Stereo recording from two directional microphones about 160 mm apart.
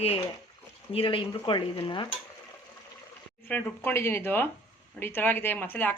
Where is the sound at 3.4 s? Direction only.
10° left (ahead or behind).